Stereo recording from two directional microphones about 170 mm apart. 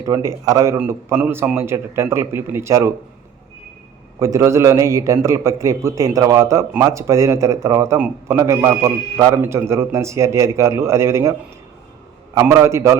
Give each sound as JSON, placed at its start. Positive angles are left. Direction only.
{"t": 0.0, "sound": "a man's voice", "side_deg": -20}
{"t": 4.2, "sound": "a man's voice", "side_deg": -15}